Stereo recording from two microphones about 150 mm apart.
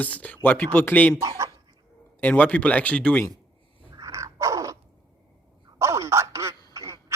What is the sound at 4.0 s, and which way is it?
Dog, 20° right (ahead or behind).